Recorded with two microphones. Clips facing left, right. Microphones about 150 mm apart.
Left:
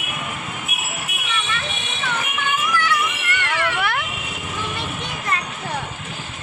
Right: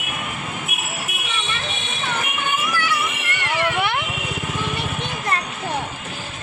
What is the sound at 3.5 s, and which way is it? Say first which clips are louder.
Vehicle: right 3 dB; 20° right (ahead or behind).